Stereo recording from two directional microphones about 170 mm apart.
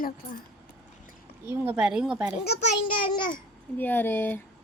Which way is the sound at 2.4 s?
70° left (ahead or behind).